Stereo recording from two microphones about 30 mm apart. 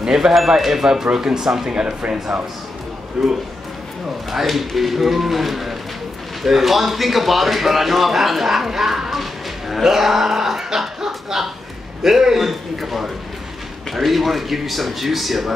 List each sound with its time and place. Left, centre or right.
0.0 s speech: right
0.6 s speech: centre
1.1 s speech: right
3.2 s speech: centre